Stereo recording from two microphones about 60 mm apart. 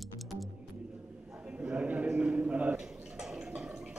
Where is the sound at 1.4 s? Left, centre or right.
Right.